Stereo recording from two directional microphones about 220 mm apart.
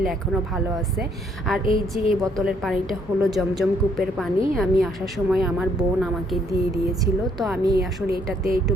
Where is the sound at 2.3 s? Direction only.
Centre (ahead or behind).